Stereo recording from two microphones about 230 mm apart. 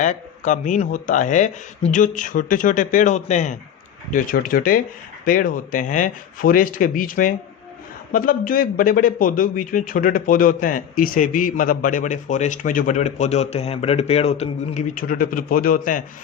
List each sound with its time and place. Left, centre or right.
0.0 s speech: left